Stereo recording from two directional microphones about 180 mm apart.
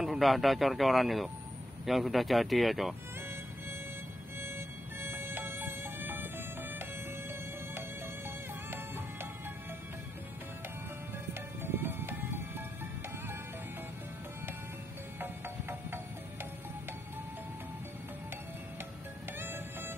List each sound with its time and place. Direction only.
0.0 s speech: centre (ahead or behind)
4.4 s music: 15° right (ahead or behind)
8.6 s music: 10° right (ahead or behind)
11.6 s music: 10° right (ahead or behind)
15.1 s music: 10° right (ahead or behind)
19.3 s music: 10° right (ahead or behind)